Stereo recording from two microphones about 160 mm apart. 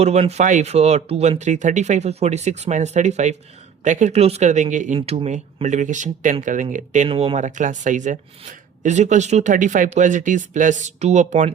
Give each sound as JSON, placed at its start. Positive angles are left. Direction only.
{"t": 0.0, "sound": "speech", "side_deg": -40}
{"t": 4.9, "sound": "speech", "side_deg": -40}
{"t": 7.1, "sound": "speech", "side_deg": -35}